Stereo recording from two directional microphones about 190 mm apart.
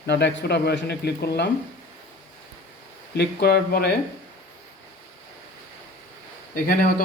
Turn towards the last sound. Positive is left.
turn(degrees=50)  # may be behind; listen again after turning